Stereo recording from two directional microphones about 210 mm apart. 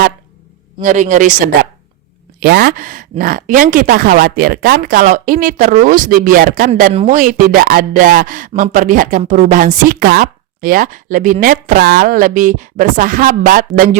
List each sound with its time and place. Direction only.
0.8 s a woman's voice: 35° right (ahead or behind)
2.4 s a woman's voice: 50° right (ahead or behind)